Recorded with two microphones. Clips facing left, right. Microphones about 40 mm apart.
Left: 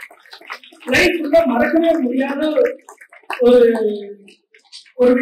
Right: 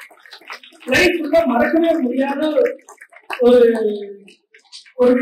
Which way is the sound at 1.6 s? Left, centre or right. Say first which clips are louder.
Left 1 dB; centre.